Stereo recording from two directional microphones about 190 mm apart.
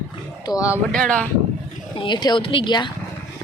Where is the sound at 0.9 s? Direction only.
5° left (ahead or behind).